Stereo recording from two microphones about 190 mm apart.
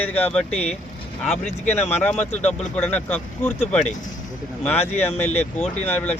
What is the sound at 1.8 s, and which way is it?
Speech, 35° left (ahead or behind).